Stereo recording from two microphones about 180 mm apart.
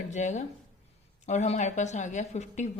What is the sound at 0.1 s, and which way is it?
A woman's voice, 40° left (ahead or behind).